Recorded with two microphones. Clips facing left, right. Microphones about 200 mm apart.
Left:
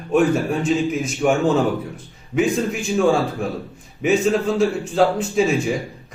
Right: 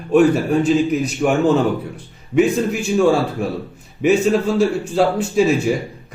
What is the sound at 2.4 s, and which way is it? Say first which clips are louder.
A man's voice: right 4 dB; centre (ahead or behind).